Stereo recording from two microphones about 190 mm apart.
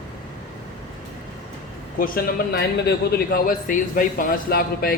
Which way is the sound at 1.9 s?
50° left (ahead or behind).